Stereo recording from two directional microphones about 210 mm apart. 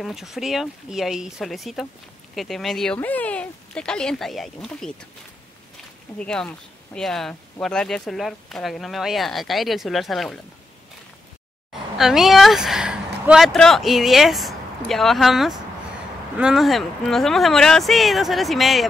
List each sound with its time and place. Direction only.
0.0 s speech: centre (ahead or behind)
6.1 s speech: 5° left (ahead or behind)
12.0 s speech: centre (ahead or behind)